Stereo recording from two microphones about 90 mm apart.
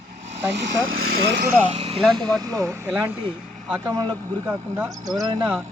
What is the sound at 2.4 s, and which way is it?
Speech, 40° right (ahead or behind).